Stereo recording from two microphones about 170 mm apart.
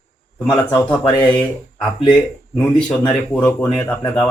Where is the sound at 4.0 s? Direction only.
20° left (ahead or behind).